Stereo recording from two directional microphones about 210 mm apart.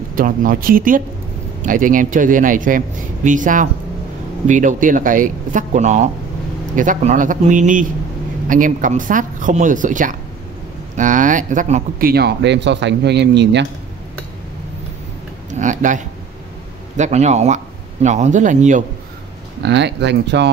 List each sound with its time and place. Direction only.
0.1 s speech: 40° right (ahead or behind)
15.6 s speech: 35° right (ahead or behind)
19.6 s speech: 55° right (ahead or behind)